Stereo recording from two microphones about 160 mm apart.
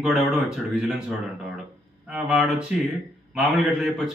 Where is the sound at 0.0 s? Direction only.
5° right (ahead or behind).